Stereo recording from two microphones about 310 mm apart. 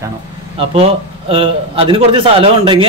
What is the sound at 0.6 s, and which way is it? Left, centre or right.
A man's voice, centre.